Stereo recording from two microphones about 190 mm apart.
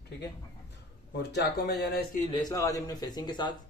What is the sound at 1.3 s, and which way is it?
Speech, 60° left (ahead or behind).